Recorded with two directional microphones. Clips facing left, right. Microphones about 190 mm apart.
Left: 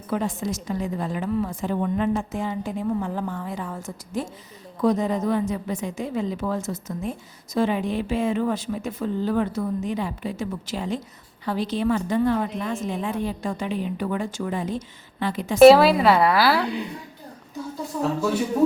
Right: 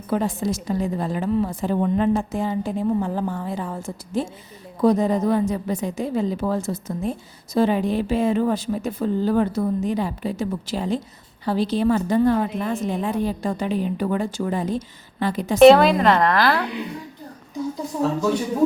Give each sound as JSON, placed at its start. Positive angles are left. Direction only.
{"t": 0.1, "sound": "a woman's voice", "side_deg": -35}
{"t": 15.5, "sound": "a woman's voice", "side_deg": 5}